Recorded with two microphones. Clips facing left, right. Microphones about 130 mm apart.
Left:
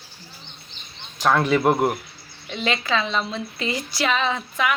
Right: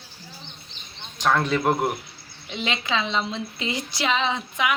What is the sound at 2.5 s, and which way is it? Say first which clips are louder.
A woman's voice: left 3 dB; 20° right (ahead or behind).